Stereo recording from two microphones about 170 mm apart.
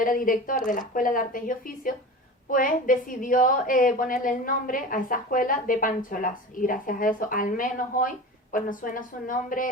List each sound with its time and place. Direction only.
0.0 s a woman's voice: 55° left (ahead or behind)